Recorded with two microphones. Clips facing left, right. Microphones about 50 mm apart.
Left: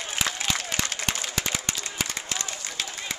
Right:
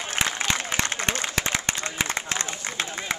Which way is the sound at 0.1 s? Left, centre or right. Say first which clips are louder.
Right 3 dB; right.